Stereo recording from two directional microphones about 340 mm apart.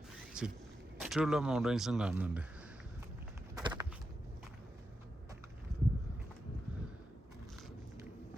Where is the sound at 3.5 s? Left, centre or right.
Centre.